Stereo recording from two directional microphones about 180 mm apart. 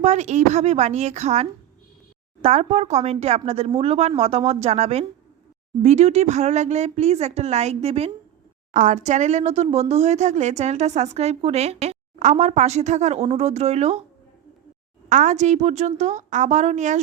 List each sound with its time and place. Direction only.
0.0 s a woman's voice: 40° right (ahead or behind)
15.1 s a woman's voice: 45° right (ahead or behind)